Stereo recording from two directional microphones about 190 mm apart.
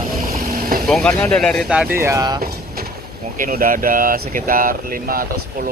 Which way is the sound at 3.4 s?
45° right (ahead or behind).